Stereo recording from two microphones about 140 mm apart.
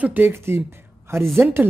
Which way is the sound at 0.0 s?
15° right (ahead or behind).